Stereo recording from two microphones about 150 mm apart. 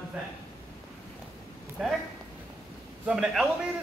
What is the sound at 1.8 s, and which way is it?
Speech, centre (ahead or behind).